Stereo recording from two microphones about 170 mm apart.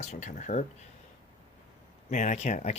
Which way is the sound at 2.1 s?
45° left (ahead or behind).